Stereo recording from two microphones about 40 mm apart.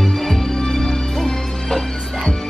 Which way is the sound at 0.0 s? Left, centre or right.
Centre.